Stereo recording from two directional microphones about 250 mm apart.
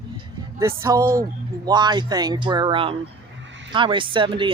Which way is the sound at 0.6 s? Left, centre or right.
Centre.